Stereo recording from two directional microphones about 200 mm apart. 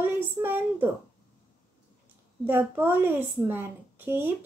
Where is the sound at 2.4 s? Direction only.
10° right (ahead or behind).